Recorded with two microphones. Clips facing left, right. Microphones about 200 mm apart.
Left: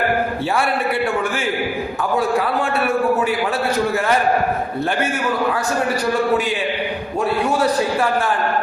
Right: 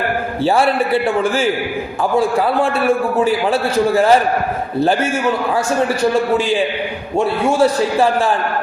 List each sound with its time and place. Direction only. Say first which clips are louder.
0.4 s a man's voice: right 9 dB; 30° right (ahead or behind)
2.1 s a man's voice: right 4 dB; 30° right (ahead or behind)
7.6 s a man's voice: right 4 dB; 25° right (ahead or behind)